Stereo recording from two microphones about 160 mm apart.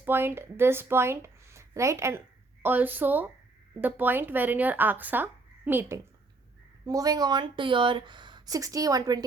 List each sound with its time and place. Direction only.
0.0 s a woman's voice: 15° right (ahead or behind)
6.8 s speech: 25° right (ahead or behind)